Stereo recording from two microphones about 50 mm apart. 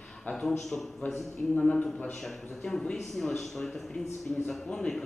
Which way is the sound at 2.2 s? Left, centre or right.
Centre.